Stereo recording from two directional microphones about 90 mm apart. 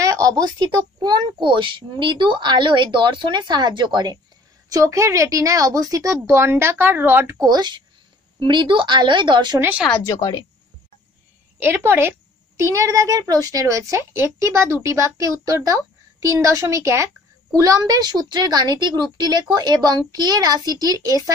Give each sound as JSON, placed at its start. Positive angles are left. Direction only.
{"t": 0.0, "sound": "a sound", "side_deg": -40}
{"t": 0.4, "sound": "a child's voice", "side_deg": -50}
{"t": 4.6, "sound": "speech", "side_deg": -40}
{"t": 7.3, "sound": "a woman's voice", "side_deg": -50}
{"t": 9.6, "sound": "a woman's voice", "side_deg": -20}
{"t": 11.6, "sound": "a woman's voice", "side_deg": -25}